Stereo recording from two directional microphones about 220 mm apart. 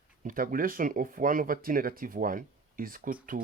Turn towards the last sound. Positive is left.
turn(degrees=-40)  # may be behind; listen again after turning